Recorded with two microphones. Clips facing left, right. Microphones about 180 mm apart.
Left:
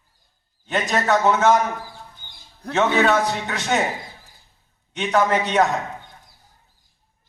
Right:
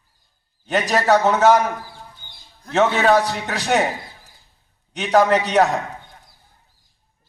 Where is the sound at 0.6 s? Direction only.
35° right (ahead or behind).